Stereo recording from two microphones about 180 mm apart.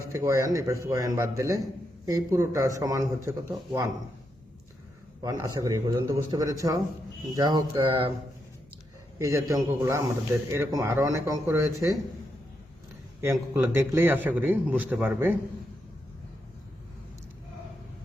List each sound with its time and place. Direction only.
0.1 s a man's voice: 15° right (ahead or behind)
5.2 s a man's voice: 20° right (ahead or behind)
9.1 s a man's voice: 15° right (ahead or behind)
13.2 s a man's voice: 15° right (ahead or behind)